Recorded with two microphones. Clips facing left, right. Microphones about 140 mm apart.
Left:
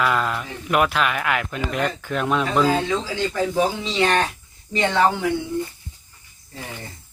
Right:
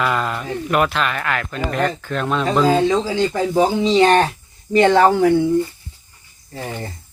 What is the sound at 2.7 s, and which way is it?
Speech, 35° right (ahead or behind).